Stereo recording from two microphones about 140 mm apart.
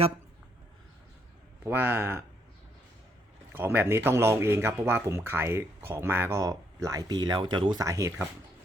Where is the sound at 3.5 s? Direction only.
15° right (ahead or behind).